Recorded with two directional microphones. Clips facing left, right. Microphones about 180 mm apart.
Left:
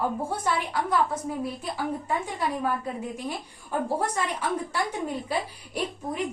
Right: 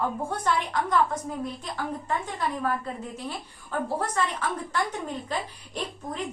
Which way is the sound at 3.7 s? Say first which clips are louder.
Left 1 dB; 15° left (ahead or behind).